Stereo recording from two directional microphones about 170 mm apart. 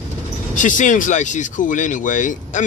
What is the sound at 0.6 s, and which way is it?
Speech, 50° left (ahead or behind).